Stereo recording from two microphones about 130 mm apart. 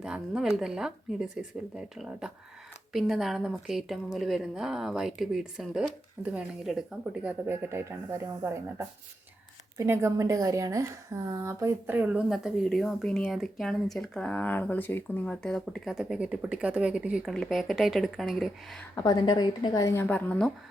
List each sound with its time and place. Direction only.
0.0 s a woman's voice: 5° right (ahead or behind)
9.7 s a woman's voice: 20° right (ahead or behind)
12.3 s a woman's voice: centre (ahead or behind)
18.9 s speech: 30° left (ahead or behind); by 20.5 s 10° left (ahead or behind)